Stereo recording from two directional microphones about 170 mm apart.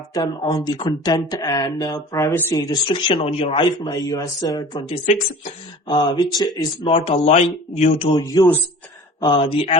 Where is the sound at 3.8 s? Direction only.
20° left (ahead or behind); by 5.5 s 40° left (ahead or behind).